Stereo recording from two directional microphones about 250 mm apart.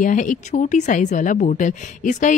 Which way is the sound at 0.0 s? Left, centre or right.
Left.